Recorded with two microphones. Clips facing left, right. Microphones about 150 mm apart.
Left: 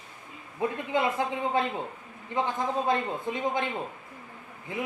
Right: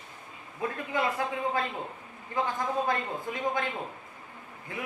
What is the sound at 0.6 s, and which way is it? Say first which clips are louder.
A man's voice: left 3 dB; 20° left (ahead or behind).